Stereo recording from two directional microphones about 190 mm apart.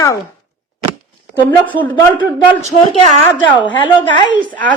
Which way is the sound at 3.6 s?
25° left (ahead or behind).